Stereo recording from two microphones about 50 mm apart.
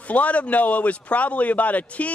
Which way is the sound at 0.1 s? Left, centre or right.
Left.